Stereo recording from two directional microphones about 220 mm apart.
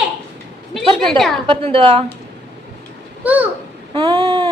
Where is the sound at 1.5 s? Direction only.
25° right (ahead or behind).